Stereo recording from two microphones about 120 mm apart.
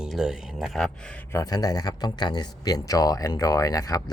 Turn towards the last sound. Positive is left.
turn(degrees=30)  # may be behind; listen again after turning